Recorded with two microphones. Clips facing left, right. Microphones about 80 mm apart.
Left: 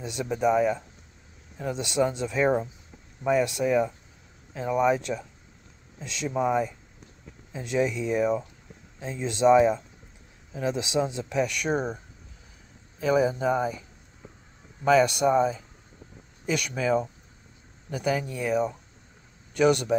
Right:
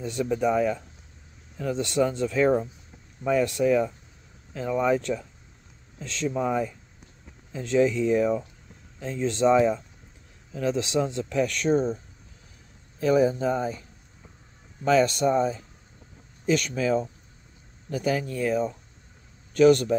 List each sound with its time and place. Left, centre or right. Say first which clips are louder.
0.0 s speech: right 1 dB; centre
11.7 s speech: right 4 dB; left
13.4 s speech: left 1 dB; centre
14.9 s speech: left 1 dB; centre
16.5 s speech: even; centre